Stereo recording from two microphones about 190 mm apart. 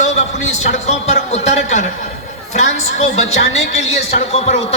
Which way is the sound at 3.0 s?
35° left (ahead or behind).